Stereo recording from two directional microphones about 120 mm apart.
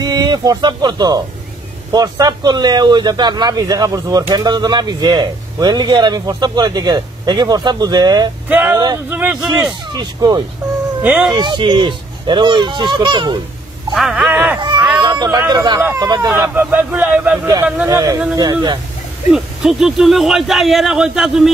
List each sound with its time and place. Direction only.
0.0 s speech: 35° right (ahead or behind)
8.5 s speech: 15° right (ahead or behind)
8.7 s speech: 35° right (ahead or behind)
9.1 s speech: 10° right (ahead or behind)
9.5 s speech: 35° right (ahead or behind)
11.0 s speech: 15° right (ahead or behind)
11.2 s speech: 35° right (ahead or behind)
13.9 s speech: 5° right (ahead or behind)
14.3 s a sound: 15° right (ahead or behind)
14.6 s a sound: 35° right (ahead or behind)
15.2 s speech: 30° right (ahead or behind)
16.3 s speech: 15° right (ahead or behind)
17.8 s speech: 30° right (ahead or behind)
19.3 s speech: 5° right (ahead or behind)